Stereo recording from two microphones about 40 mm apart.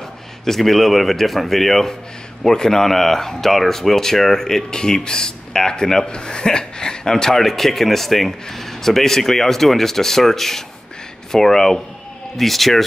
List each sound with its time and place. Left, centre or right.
0.5 s a man's voice: centre
7.3 s a man's voice: centre